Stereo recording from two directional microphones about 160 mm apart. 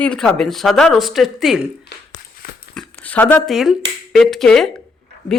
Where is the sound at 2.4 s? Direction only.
65° left (ahead or behind).